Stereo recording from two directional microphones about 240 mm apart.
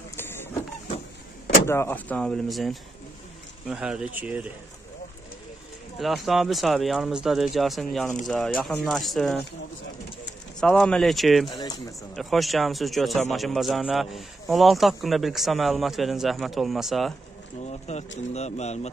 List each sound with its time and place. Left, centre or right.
0.1 s vehicle: centre
1.7 s a man's voice: centre
5.9 s a man's voice: centre
10.6 s a man's voice: centre
11.4 s speech: centre
12.2 s a man's voice: centre
17.6 s speech: left